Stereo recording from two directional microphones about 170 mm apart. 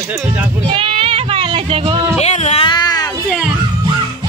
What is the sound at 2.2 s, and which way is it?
Speech, 40° left (ahead or behind).